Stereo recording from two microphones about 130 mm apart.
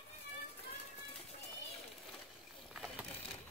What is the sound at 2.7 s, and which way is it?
Vehicle, 5° right (ahead or behind).